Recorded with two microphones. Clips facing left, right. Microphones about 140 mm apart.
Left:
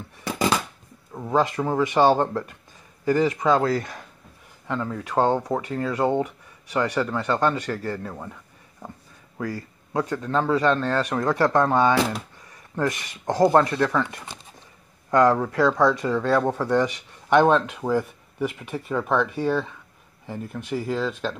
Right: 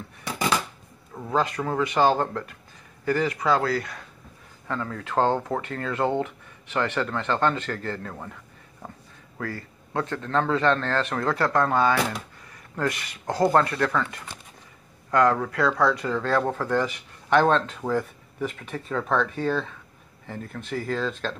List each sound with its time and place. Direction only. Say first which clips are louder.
1.1 s speech: left 3 dB; 15° left (ahead or behind)
9.9 s speech: left 2 dB; 15° left (ahead or behind)